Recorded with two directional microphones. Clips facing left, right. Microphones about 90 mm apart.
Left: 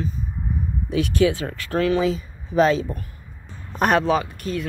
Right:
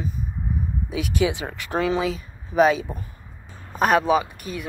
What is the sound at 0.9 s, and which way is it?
Speech, 10° right (ahead or behind).